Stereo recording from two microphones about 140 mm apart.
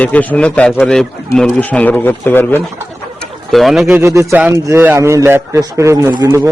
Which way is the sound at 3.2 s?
Centre (ahead or behind).